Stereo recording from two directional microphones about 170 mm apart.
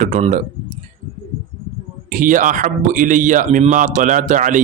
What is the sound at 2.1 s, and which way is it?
Speech, 50° right (ahead or behind).